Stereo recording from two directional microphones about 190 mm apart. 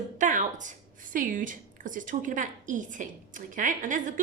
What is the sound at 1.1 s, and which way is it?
A woman's voice, 45° right (ahead or behind).